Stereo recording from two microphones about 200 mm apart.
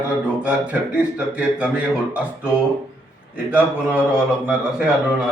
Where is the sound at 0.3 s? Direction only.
5° right (ahead or behind).